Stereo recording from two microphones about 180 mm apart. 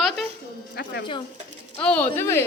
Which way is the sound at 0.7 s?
60° left (ahead or behind).